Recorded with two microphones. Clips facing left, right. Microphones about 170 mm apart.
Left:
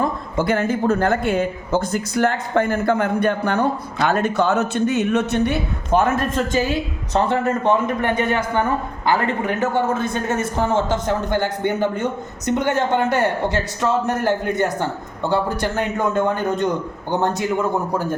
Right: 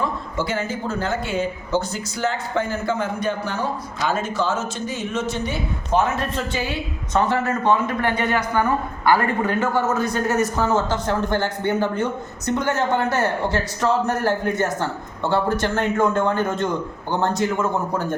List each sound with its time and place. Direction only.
0.0 s speech: 55° left (ahead or behind)
6.0 s a woman's voice: 50° left (ahead or behind); by 17.5 s 15° left (ahead or behind)